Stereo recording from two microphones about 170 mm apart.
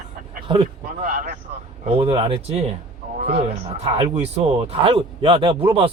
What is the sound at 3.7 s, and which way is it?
A man's voice, 35° right (ahead or behind).